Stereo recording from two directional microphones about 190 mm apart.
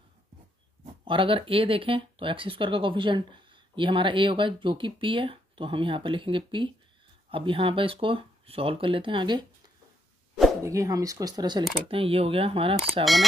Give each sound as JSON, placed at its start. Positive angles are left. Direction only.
{"t": 1.0, "sound": "speech", "side_deg": -25}
{"t": 10.6, "sound": "speech", "side_deg": -15}